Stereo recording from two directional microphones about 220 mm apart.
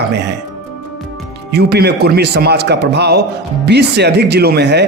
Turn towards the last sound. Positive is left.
turn(degrees=-50)  # may be behind; listen again after turning